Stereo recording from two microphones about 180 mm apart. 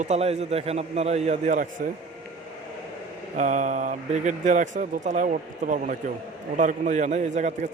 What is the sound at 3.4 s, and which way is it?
Speech, 45° right (ahead or behind).